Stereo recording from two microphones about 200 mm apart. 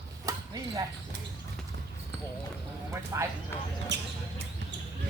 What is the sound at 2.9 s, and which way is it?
Speech, 15° right (ahead or behind).